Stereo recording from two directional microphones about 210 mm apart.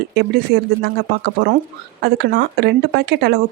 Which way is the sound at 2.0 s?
50° right (ahead or behind).